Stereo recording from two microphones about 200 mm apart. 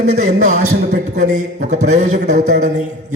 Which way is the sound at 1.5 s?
35° right (ahead or behind).